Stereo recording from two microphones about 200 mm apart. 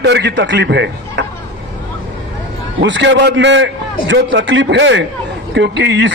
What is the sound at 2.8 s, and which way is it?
A man's voice, 65° right (ahead or behind).